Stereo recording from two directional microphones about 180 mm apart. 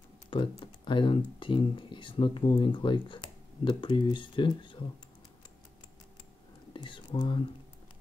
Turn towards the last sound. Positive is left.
turn(degrees=25)  # may be behind; listen again after turning